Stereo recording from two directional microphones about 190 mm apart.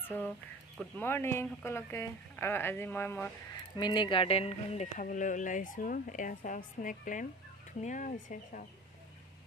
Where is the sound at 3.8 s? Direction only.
25° left (ahead or behind); by 8.6 s 45° left (ahead or behind).